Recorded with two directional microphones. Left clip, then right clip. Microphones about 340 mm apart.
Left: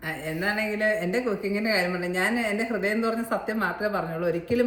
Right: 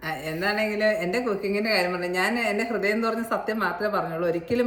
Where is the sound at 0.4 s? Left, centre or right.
Centre.